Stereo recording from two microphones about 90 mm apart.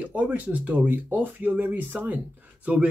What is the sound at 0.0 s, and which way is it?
Speech, 15° right (ahead or behind).